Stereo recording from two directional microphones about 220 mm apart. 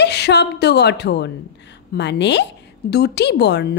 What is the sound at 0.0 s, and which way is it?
A woman's voice, 50° left (ahead or behind).